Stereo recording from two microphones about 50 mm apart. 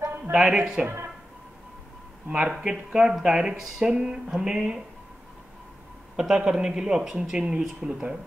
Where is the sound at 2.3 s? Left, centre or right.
Centre.